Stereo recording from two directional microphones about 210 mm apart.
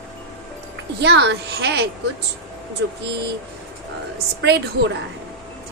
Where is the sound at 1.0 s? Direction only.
55° right (ahead or behind).